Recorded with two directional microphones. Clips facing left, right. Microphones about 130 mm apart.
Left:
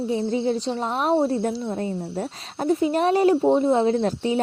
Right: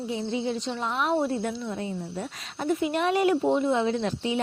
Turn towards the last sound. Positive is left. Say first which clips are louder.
# left 5 dB
turn(degrees=40)  # may be behind; listen again after turning